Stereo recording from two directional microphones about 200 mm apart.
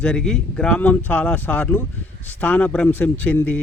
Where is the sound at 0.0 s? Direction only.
5° left (ahead or behind).